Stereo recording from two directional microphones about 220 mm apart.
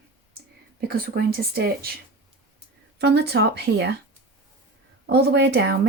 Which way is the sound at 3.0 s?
50° right (ahead or behind).